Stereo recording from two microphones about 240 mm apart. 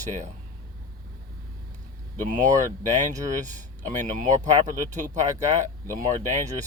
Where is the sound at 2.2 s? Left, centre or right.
Right.